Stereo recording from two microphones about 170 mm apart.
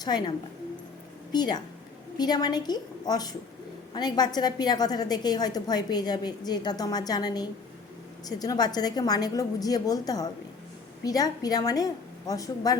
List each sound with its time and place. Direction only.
0.0 s a woman's voice: 25° left (ahead or behind)